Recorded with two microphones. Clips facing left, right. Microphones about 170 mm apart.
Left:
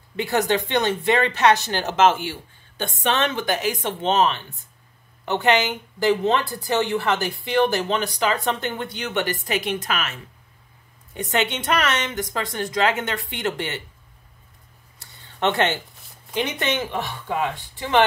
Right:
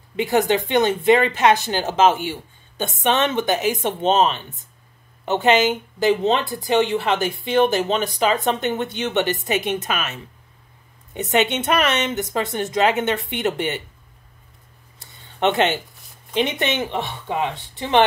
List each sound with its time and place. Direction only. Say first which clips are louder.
0.1 s speech: right 3 dB; 20° right (ahead or behind)
15.3 s speech: right 3 dB; 20° right (ahead or behind)